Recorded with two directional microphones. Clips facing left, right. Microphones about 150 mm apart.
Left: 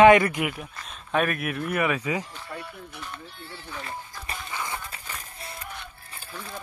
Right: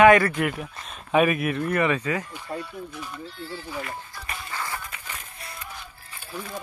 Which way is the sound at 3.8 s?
30° left (ahead or behind).